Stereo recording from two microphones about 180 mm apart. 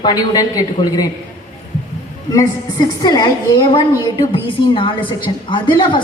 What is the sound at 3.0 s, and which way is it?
A woman's voice, 20° left (ahead or behind).